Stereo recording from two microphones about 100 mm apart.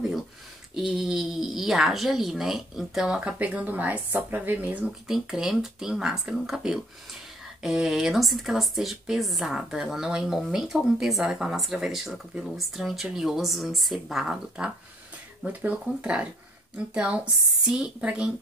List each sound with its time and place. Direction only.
0.7 s a woman's voice: 5° right (ahead or behind)
5.0 s a woman's voice: 5° right (ahead or behind)